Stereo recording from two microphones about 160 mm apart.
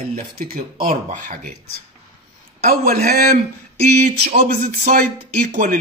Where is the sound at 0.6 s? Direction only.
60° right (ahead or behind).